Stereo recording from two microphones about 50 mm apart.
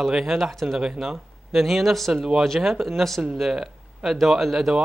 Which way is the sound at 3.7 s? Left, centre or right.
Centre.